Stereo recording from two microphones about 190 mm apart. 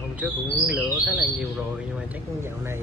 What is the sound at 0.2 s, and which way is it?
Speech, 5° right (ahead or behind).